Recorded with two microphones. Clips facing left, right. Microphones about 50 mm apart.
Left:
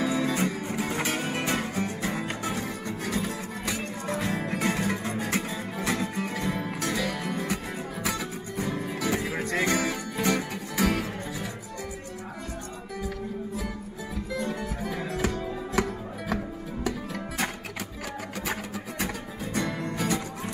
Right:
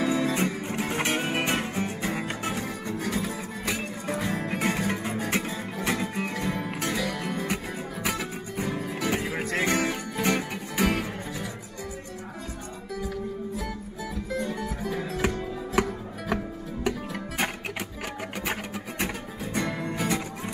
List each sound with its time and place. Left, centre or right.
0.0 s music: centre
3.0 s music: centre
14.4 s music: centre
18.5 s music: centre